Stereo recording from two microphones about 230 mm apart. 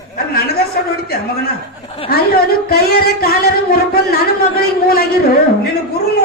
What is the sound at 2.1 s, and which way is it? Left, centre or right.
Speech, left.